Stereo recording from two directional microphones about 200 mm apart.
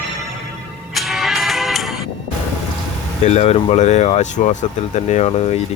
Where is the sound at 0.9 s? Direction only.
Centre (ahead or behind).